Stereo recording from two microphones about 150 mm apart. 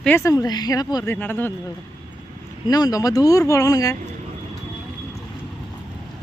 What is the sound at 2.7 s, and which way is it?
Speech, 25° left (ahead or behind).